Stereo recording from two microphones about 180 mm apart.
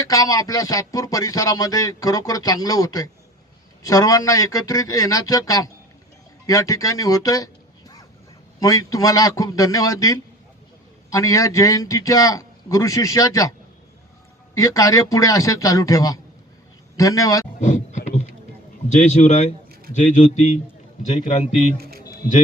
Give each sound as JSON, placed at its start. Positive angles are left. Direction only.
{"t": 0.0, "sound": "a man's voice", "side_deg": 20}
{"t": 14.5, "sound": "a man's voice", "side_deg": 20}
{"t": 17.6, "sound": "a sound", "side_deg": 40}
{"t": 18.9, "sound": "a man's voice", "side_deg": 40}
{"t": 21.8, "sound": "a sound", "side_deg": -60}
{"t": 22.0, "sound": "music", "side_deg": 55}